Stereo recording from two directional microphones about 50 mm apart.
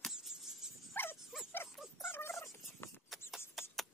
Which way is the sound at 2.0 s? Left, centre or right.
Left.